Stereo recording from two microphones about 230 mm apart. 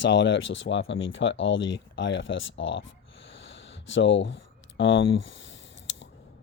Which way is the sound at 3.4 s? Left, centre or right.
Left.